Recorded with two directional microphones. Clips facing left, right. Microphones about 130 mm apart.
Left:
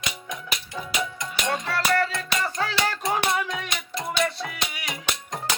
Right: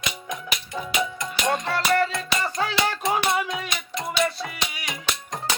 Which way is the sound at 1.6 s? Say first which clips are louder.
Even; 20° right (ahead or behind).